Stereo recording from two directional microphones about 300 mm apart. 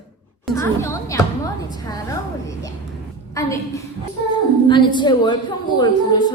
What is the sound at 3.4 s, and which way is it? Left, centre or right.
Speech, centre.